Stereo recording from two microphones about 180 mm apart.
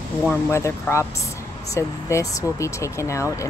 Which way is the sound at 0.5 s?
15° left (ahead or behind).